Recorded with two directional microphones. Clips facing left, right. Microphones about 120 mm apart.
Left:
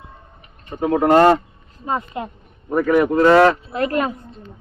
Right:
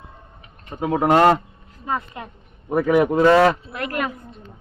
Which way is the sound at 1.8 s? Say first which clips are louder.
Left 3 dB; 25° left (ahead or behind).